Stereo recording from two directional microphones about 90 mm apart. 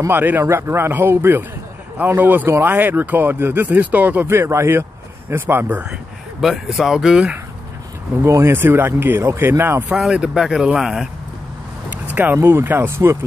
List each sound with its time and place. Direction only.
0.1 s speech: 25° right (ahead or behind)
6.4 s speech: centre (ahead or behind)
8.2 s speech: 30° right (ahead or behind)
9.8 s speech: 10° right (ahead or behind)
12.1 s a sound: 20° right (ahead or behind)
12.4 s speech: 25° right (ahead or behind)